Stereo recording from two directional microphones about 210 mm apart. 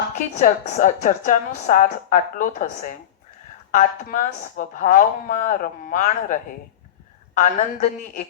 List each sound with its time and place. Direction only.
0.2 s a woman's voice: 35° left (ahead or behind)